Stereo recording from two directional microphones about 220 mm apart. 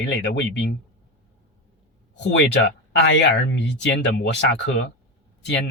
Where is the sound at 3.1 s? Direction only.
55° left (ahead or behind).